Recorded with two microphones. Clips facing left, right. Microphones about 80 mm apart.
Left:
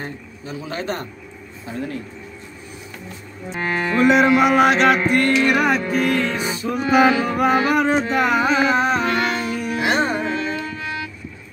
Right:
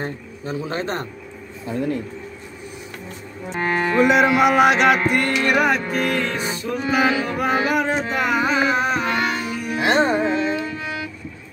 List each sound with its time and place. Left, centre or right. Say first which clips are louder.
0.0 s speech: right 3 dB; right
3.6 s music: right 2 dB; right
4.0 s speech: left 1 dB; centre
5.1 s music: left 2 dB; centre
9.8 s music: right 3 dB; right; by 11.1 s centre